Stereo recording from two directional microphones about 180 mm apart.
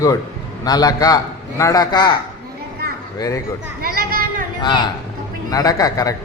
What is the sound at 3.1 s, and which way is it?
Speech, 20° left (ahead or behind).